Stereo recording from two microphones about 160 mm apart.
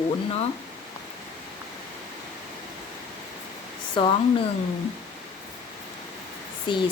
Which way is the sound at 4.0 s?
30° left (ahead or behind).